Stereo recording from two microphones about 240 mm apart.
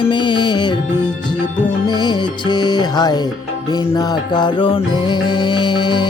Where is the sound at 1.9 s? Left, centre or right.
Centre.